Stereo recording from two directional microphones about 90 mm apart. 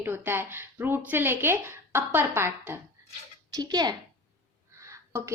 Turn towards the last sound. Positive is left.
turn(degrees=-30)  # may be behind; listen again after turning